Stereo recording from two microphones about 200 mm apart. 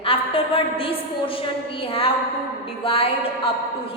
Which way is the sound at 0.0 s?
30° left (ahead or behind).